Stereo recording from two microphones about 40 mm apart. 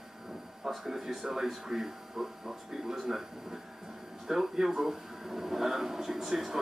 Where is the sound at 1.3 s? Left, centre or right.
Centre.